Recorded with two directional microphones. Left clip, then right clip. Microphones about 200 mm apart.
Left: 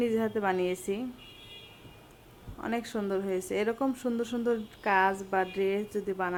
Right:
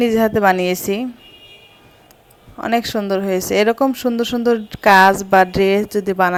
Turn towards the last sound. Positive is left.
turn(degrees=-45)  # may be behind; listen again after turning